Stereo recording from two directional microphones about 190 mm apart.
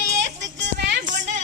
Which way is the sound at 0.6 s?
65° right (ahead or behind).